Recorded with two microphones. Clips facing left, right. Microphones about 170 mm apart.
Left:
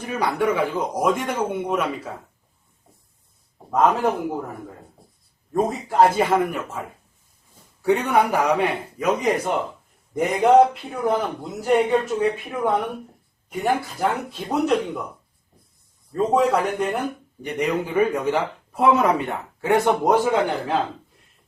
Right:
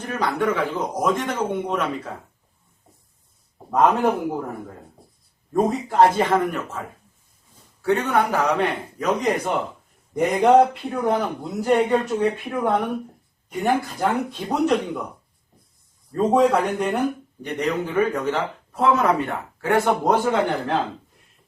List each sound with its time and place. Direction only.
0.0 s a man's voice: 10° left (ahead or behind)
3.7 s speech: centre (ahead or behind)
5.5 s a man's voice: centre (ahead or behind)
16.1 s speech: centre (ahead or behind)
17.4 s a man's voice: 10° left (ahead or behind)